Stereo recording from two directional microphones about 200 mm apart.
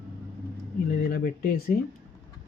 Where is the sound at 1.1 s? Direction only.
50° left (ahead or behind).